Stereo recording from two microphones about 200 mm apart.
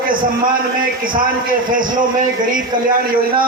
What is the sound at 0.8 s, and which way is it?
Speech, 45° right (ahead or behind).